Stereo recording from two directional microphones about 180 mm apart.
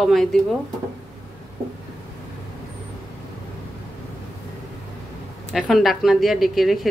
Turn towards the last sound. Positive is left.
turn(degrees=0)  # may be behind; listen again after turning